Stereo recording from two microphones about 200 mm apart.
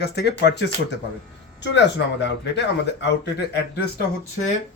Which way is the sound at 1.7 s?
60° left (ahead or behind).